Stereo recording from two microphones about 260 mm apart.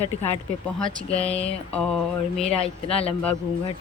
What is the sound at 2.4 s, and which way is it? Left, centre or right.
Speech, left.